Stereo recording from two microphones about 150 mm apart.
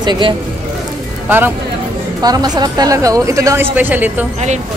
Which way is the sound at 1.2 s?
15° right (ahead or behind).